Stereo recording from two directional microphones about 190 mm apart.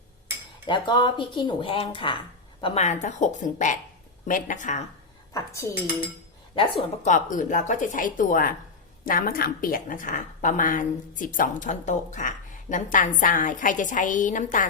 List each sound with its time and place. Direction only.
0.7 s a woman's voice: 25° left (ahead or behind)
2.8 s a woman's voice: 40° left (ahead or behind)
5.3 s speech: 15° left (ahead or behind)
7.0 s a woman's voice: 40° left (ahead or behind)